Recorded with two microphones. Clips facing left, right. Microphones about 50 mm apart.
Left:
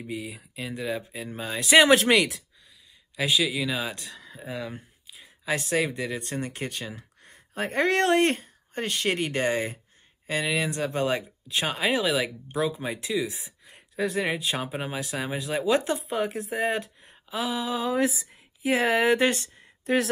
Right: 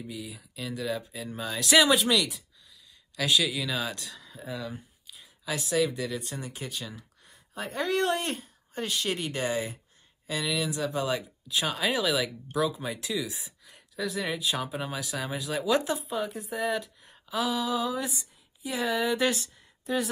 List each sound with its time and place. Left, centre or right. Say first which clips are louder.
0.0 s speech: left 4 dB; left
1.9 s speech: left 5 dB; left
3.2 s a man's voice: left 2 dB; centre
6.1 s speech: left 4 dB; left
16.1 s speech: left 4 dB; left
17.0 s a sound: right 1 dB; left
18.1 s speech: left 1 dB; left
19.1 s speech: left 3 dB; left
19.9 s speech: left 5 dB; left